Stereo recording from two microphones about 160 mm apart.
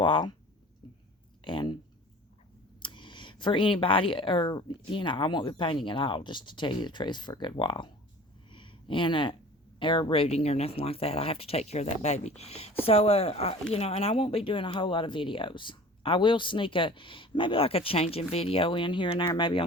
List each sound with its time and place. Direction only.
0.0 s speech: 30° left (ahead or behind)
1.5 s speech: 30° left (ahead or behind)
2.8 s speech: 30° left (ahead or behind)
8.4 s a sound: 30° left (ahead or behind)
9.7 s speech: 30° left (ahead or behind)